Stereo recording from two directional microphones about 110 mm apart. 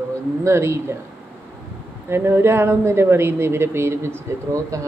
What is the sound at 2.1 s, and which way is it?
Speech, 20° right (ahead or behind).